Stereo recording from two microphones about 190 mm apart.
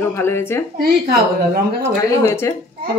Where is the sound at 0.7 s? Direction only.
50° right (ahead or behind).